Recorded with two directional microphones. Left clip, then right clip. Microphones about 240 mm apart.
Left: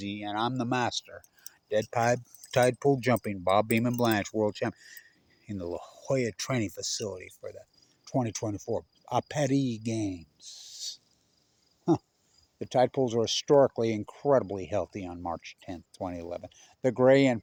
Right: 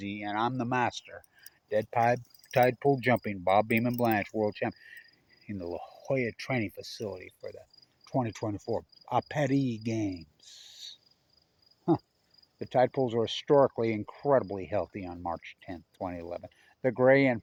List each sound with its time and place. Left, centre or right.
0.0 s speech: centre
12.5 s speech: centre